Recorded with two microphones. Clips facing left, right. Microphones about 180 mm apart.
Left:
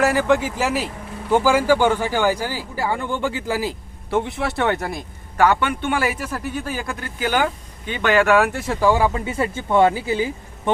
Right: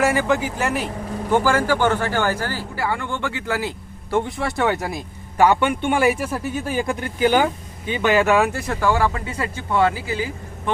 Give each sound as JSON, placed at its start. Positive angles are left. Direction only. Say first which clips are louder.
{"t": 0.0, "sound": "speech", "louder": "left 1 dB", "side_deg": 0}
{"t": 4.1, "sound": "speech", "louder": "even", "side_deg": 5}